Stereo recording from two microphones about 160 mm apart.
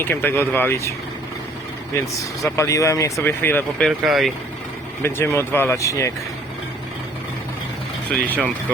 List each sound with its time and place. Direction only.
0.0 s speech: 10° left (ahead or behind)
2.0 s speech: 20° left (ahead or behind)
3.8 s speech: centre (ahead or behind)
5.0 s speech: 15° left (ahead or behind)
8.1 s speech: 10° left (ahead or behind)